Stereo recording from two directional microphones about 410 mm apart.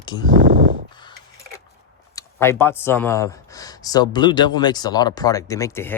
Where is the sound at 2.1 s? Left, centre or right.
Centre.